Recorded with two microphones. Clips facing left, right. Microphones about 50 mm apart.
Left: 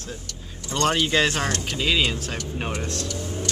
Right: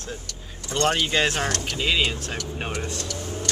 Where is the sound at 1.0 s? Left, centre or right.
Centre.